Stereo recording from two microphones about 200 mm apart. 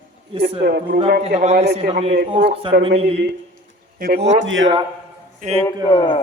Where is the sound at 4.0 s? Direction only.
45° right (ahead or behind).